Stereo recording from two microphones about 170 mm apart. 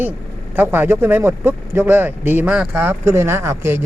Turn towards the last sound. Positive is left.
turn(degrees=-15)  # may be behind; listen again after turning